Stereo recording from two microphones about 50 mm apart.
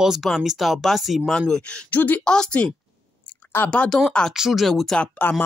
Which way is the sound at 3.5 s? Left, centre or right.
Left.